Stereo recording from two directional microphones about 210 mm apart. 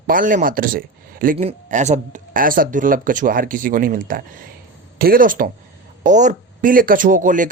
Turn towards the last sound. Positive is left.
turn(degrees=-40)  # may be behind; listen again after turning